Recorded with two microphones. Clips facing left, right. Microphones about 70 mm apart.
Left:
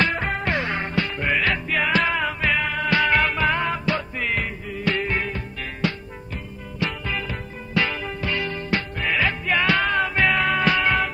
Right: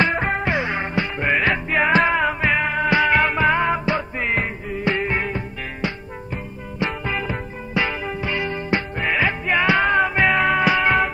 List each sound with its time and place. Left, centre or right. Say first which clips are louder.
0.2 s music: right 3 dB; centre